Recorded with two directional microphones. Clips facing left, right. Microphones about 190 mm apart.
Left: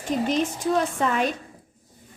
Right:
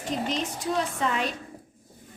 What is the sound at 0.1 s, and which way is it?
A woman's voice, 50° left (ahead or behind).